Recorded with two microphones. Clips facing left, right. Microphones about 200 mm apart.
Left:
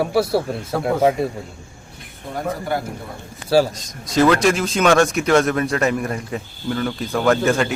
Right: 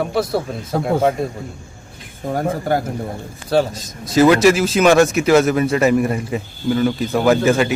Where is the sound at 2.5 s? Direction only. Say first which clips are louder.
Right 4 dB; 40° right (ahead or behind).